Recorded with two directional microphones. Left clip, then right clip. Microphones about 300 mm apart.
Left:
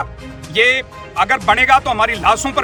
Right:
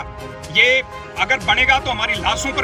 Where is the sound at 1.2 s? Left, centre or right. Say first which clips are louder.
Left 3 dB; centre.